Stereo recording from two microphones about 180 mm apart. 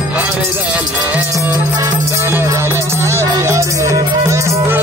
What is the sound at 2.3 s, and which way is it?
Music, 10° right (ahead or behind).